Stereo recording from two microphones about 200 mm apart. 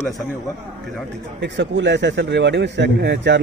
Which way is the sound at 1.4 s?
60° right (ahead or behind).